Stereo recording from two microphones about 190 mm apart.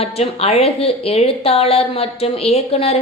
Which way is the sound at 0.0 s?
35° left (ahead or behind).